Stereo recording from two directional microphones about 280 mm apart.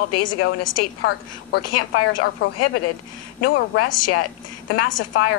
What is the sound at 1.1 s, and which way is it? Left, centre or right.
A woman's voice, left.